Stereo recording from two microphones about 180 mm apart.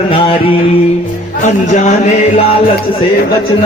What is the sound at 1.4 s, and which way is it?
Speech, 45° left (ahead or behind).